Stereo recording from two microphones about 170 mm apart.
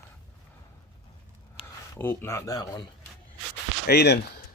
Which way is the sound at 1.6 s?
30° left (ahead or behind).